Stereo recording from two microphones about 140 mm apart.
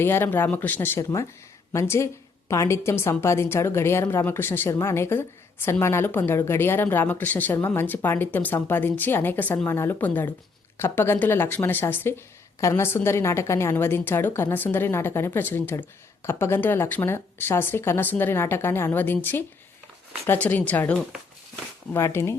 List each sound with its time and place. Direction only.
0.0 s a woman's voice: 15° left (ahead or behind)